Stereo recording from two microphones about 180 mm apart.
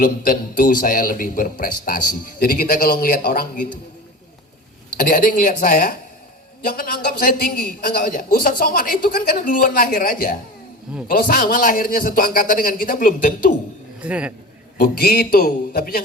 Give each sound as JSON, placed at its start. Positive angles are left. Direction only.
{"t": 0.0, "sound": "a man's voice", "side_deg": 50}
{"t": 4.9, "sound": "a man's voice", "side_deg": 50}
{"t": 14.0, "sound": "speech", "side_deg": -5}
{"t": 14.8, "sound": "a man's voice", "side_deg": 55}